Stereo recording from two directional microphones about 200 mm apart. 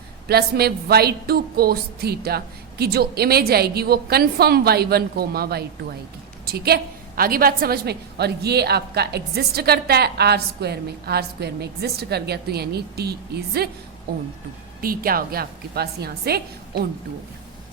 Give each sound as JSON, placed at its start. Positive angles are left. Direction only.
{"t": 0.3, "sound": "a woman's voice", "side_deg": -50}
{"t": 14.8, "sound": "a woman's voice", "side_deg": -45}